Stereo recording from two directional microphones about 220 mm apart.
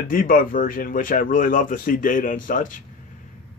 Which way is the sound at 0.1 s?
40° left (ahead or behind).